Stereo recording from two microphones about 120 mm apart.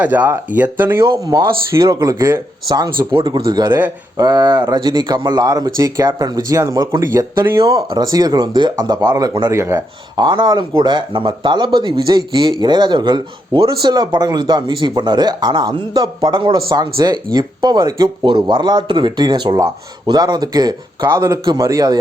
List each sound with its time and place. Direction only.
0.0 s speech: 15° right (ahead or behind)
1.2 s speech: 30° right (ahead or behind)
3.7 s speech: 15° right (ahead or behind)
4.2 s speech: 35° right (ahead or behind)
10.2 s speech: 35° right (ahead or behind)